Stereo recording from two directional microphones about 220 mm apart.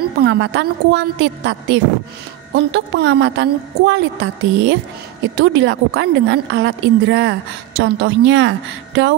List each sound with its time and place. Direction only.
0.2 s a woman's voice: 50° right (ahead or behind)